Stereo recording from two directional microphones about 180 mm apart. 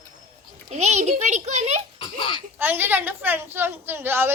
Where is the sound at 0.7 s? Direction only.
40° right (ahead or behind).